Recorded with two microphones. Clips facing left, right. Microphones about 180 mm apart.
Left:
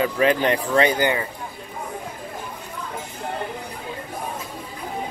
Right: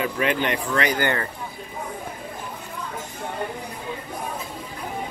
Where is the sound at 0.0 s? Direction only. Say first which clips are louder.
Left 4 dB; 35° left (ahead or behind).